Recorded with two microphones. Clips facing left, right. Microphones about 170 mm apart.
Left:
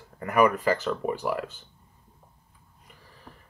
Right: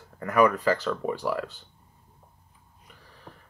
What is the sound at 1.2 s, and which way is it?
Speech, centre (ahead or behind).